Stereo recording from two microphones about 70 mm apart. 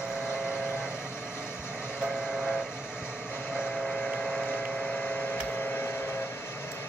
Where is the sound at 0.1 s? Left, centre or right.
Left.